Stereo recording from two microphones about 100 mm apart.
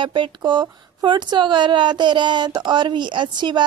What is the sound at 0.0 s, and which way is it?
Speech, 55° right (ahead or behind).